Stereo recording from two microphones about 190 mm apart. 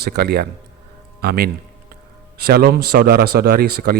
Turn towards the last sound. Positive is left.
turn(degrees=-50)  # may be behind; listen again after turning